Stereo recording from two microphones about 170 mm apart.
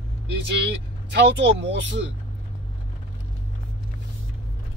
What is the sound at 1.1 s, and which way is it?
Speech, 90° right.